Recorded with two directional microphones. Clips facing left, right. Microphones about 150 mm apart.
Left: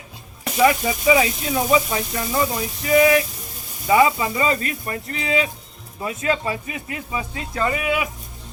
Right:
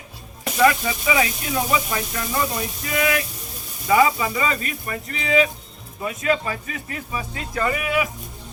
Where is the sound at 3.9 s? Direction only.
30° left (ahead or behind).